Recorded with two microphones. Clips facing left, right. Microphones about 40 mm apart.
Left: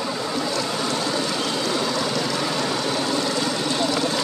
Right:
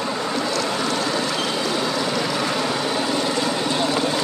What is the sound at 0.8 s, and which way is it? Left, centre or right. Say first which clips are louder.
Vehicle: right 2 dB; centre.